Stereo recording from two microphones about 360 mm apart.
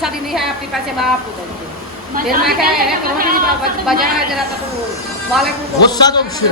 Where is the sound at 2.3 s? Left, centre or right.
Right.